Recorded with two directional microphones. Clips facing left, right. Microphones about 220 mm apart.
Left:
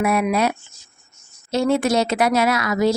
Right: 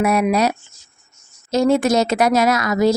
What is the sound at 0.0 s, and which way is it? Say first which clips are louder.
A woman's voice: right 2 dB; 40° right (ahead or behind).